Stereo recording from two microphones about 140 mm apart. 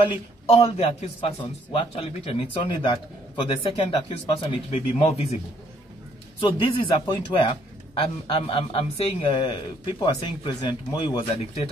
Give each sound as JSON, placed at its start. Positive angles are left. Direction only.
{"t": 0.0, "sound": "a man's voice", "side_deg": 50}
{"t": 6.4, "sound": "a man's voice", "side_deg": 40}
{"t": 9.4, "sound": "a man's voice", "side_deg": 30}